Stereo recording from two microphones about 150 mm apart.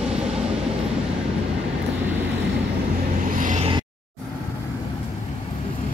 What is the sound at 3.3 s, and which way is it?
Vehicle, 60° right (ahead or behind).